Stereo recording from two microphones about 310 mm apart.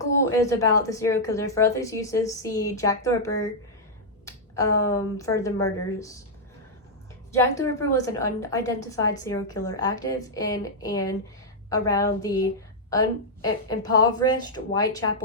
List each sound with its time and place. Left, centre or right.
0.3 s speech: centre
7.3 s speech: centre